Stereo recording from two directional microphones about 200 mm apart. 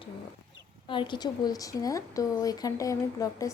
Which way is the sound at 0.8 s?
25° left (ahead or behind).